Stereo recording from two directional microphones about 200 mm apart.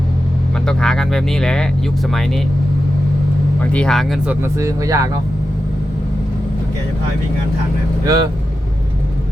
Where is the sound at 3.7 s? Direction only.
5° left (ahead or behind); by 5.1 s 15° right (ahead or behind).